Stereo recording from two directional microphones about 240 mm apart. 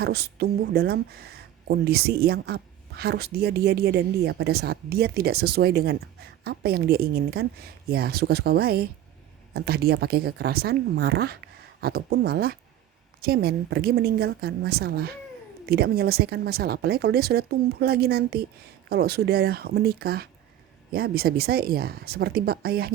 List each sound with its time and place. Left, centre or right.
0.0 s speech: right